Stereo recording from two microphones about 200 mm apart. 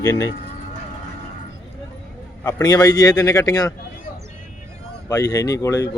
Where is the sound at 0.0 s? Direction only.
15° left (ahead or behind).